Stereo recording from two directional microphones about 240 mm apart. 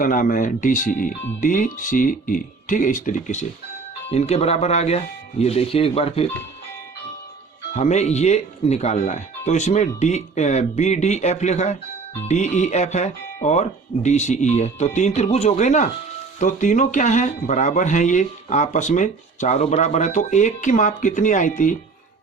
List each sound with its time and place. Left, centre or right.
0.0 s speech: left
7.7 s speech: left